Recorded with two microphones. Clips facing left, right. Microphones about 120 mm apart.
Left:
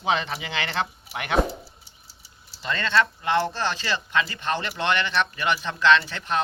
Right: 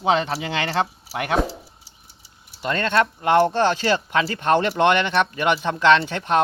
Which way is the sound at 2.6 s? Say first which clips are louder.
Right 3 dB; 55° right (ahead or behind).